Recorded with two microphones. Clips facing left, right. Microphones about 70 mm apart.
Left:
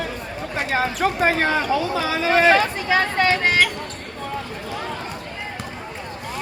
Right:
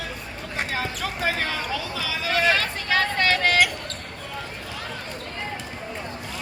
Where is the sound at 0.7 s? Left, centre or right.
Left; by 3.5 s centre.